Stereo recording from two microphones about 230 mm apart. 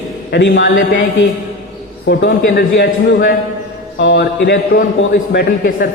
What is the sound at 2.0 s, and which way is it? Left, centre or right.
A man's voice, left.